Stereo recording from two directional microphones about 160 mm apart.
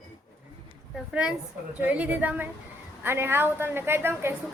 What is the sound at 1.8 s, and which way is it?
A woman's voice, 10° right (ahead or behind).